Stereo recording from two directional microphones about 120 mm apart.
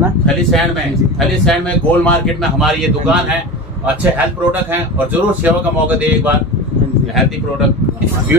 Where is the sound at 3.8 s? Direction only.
15° right (ahead or behind).